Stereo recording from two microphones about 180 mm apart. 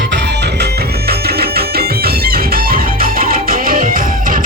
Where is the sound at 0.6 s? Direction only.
60° right (ahead or behind).